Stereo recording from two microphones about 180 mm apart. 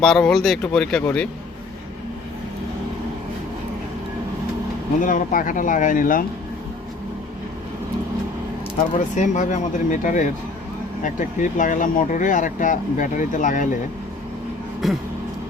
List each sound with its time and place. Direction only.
0.0 s speech: centre (ahead or behind)
5.0 s speech: 50° left (ahead or behind)
9.1 s speech: 40° left (ahead or behind)
14.8 s speech: centre (ahead or behind)